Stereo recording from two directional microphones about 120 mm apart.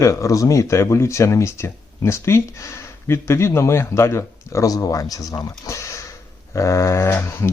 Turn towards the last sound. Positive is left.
turn(degrees=20)  # may be behind; listen again after turning